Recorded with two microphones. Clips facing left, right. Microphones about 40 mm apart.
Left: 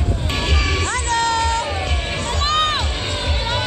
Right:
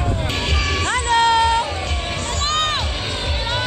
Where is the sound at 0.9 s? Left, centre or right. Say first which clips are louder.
Right 6 dB; centre.